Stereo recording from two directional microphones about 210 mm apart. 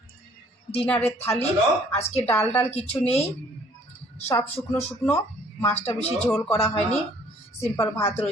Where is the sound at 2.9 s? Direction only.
30° left (ahead or behind).